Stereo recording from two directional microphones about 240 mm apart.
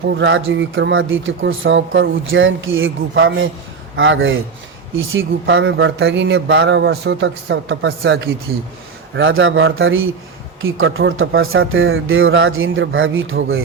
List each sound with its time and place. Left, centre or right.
0.2 s a man's voice: right